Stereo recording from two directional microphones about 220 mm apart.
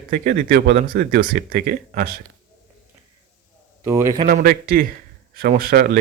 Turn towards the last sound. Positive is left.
turn(degrees=-40)  # may be behind; listen again after turning